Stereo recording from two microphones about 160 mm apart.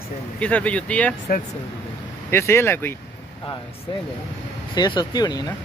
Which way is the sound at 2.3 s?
15° left (ahead or behind).